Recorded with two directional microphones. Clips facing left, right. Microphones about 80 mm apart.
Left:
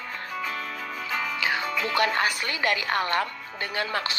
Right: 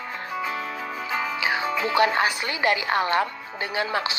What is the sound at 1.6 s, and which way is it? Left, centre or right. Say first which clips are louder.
Music: right 3 dB; right.